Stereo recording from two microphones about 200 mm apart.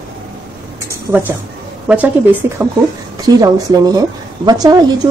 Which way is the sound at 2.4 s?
10° right (ahead or behind).